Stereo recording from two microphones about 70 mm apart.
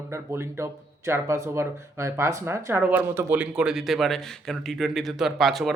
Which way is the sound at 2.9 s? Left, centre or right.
Right.